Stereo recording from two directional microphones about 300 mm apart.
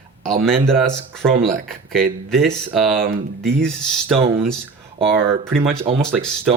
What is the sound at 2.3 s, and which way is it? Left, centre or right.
Speech, centre.